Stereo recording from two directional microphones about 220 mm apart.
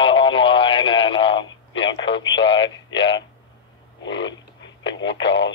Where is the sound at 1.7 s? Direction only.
60° left (ahead or behind).